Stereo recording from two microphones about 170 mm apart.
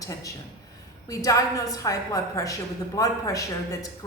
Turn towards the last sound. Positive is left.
turn(degrees=20)  # may be behind; listen again after turning